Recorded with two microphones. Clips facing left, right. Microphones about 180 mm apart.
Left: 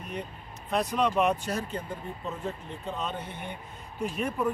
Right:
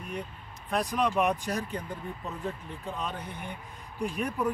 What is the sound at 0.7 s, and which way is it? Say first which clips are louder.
A man's voice: left 1 dB; 10° right (ahead or behind).